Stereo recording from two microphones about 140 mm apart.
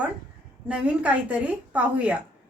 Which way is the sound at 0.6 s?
10° right (ahead or behind).